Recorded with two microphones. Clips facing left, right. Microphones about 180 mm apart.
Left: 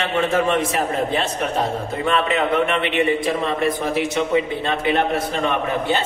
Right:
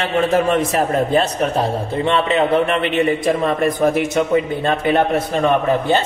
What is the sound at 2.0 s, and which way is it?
A man's voice, 30° right (ahead or behind).